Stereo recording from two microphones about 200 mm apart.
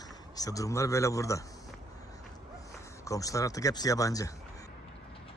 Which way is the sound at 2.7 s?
15° left (ahead or behind).